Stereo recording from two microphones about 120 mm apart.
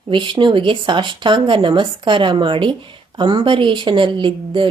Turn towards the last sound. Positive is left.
turn(degrees=-40)  # may be behind; listen again after turning